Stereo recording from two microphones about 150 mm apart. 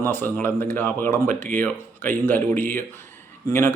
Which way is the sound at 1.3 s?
60° right (ahead or behind).